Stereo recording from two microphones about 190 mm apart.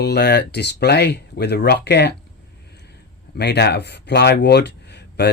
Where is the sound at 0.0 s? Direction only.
60° left (ahead or behind).